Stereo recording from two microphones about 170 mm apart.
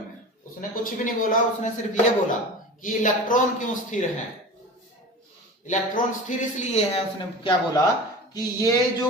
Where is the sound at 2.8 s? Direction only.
50° left (ahead or behind).